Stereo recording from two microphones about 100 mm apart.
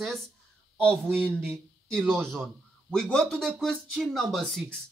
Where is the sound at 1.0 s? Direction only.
20° right (ahead or behind).